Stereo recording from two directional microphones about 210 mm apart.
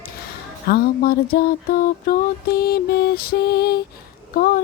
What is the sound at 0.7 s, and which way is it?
Mantra, 45° left (ahead or behind).